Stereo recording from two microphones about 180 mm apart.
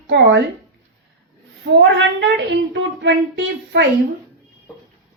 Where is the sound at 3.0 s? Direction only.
80° right.